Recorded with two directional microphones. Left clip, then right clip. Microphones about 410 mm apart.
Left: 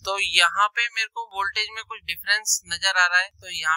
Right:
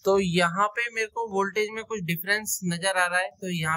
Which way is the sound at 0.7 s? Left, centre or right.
Centre.